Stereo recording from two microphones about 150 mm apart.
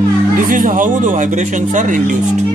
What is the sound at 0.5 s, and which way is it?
Speech, 60° right (ahead or behind).